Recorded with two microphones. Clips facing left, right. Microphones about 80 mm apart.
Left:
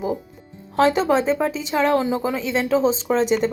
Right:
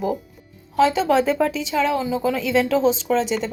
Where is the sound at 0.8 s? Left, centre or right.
Left.